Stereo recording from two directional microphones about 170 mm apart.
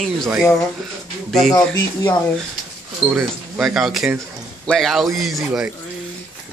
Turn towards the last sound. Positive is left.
turn(degrees=0)  # may be behind; listen again after turning